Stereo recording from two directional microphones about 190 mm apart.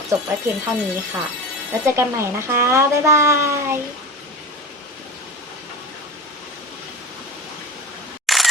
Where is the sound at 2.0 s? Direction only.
15° right (ahead or behind).